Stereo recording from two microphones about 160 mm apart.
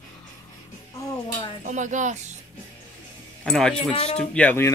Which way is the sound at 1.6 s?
50° right (ahead or behind).